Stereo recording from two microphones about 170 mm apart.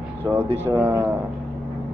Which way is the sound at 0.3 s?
10° right (ahead or behind).